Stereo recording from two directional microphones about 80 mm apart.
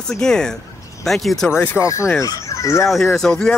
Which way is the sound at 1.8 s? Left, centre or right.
Left.